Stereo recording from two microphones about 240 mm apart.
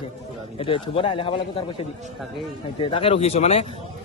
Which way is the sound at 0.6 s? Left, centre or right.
Left.